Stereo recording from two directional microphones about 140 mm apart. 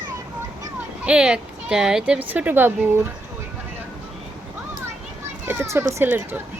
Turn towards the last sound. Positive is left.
turn(degrees=-15)  # may be behind; listen again after turning